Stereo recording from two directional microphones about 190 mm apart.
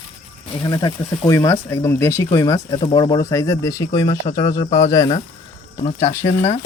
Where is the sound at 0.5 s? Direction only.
20° left (ahead or behind).